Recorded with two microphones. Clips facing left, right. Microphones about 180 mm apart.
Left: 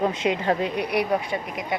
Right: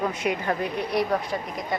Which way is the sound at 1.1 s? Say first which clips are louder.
Left 1 dB; 5° left (ahead or behind).